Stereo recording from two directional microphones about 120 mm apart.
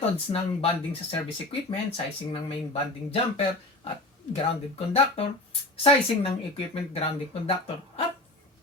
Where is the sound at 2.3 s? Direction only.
55° left (ahead or behind).